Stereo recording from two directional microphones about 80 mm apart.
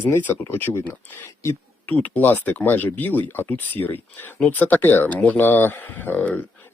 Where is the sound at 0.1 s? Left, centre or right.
Left.